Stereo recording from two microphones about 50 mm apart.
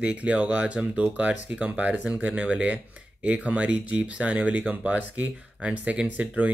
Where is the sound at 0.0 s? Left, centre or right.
Right.